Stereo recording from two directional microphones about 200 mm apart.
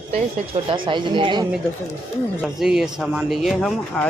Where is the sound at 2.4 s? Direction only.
Centre (ahead or behind).